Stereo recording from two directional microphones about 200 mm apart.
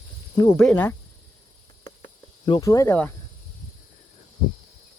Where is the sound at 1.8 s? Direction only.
20° left (ahead or behind).